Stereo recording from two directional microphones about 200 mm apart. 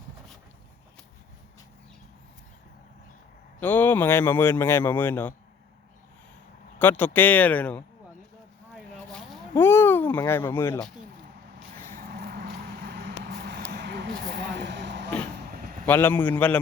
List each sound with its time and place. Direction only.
3.6 s speech: 10° left (ahead or behind)
6.7 s speech: 10° left (ahead or behind)
8.7 s a sound: centre (ahead or behind)
9.6 s speech: 10° left (ahead or behind)
11.9 s a sound: 55° right (ahead or behind)
15.4 s vehicle: 50° right (ahead or behind)
15.9 s speech: 10° left (ahead or behind)